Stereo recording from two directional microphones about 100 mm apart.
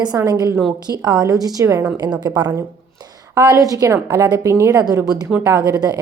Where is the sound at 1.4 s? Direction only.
30° right (ahead or behind).